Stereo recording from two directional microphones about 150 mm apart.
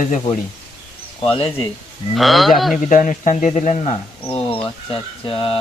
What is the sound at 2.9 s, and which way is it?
Speech, 55° left (ahead or behind).